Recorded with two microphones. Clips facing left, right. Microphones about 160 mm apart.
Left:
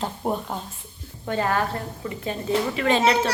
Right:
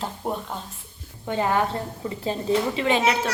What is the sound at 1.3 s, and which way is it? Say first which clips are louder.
A woman's voice: right 1 dB; 20° right (ahead or behind).